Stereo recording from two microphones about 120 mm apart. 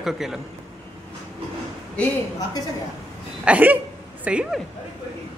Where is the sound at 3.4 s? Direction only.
10° right (ahead or behind).